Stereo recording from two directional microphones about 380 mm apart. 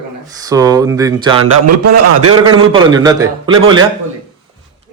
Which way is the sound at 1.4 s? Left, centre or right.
Right.